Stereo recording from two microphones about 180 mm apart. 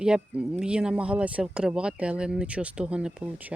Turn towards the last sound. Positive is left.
turn(degrees=-10)  # may be behind; listen again after turning